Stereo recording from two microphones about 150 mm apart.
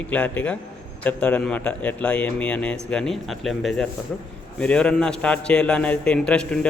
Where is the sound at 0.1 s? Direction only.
10° left (ahead or behind).